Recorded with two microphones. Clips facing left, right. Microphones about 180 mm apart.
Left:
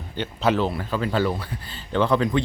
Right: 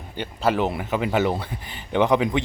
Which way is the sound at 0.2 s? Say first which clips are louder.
Even; 10° right (ahead or behind).